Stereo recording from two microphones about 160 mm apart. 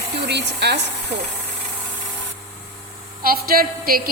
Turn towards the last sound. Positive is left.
turn(degrees=-65)  # may be behind; listen again after turning